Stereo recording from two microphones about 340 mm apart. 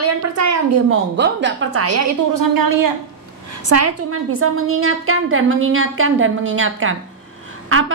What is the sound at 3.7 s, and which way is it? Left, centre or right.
A woman's voice, right.